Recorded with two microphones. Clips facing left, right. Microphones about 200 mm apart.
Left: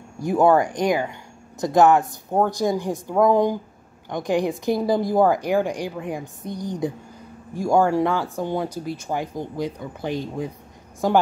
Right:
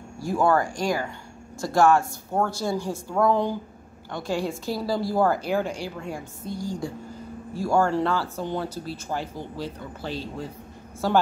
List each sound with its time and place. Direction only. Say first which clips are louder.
0.2 s speech: left 5 dB; 20° left (ahead or behind)